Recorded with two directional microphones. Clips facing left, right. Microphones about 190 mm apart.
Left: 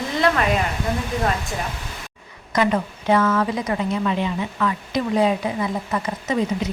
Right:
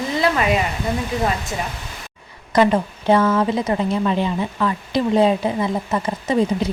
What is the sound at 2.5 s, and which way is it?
A woman's voice, 30° right (ahead or behind).